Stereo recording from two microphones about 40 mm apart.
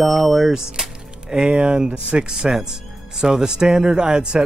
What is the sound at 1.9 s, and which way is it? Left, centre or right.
Speech, right.